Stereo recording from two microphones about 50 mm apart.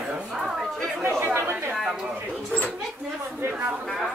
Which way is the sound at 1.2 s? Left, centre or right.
Right.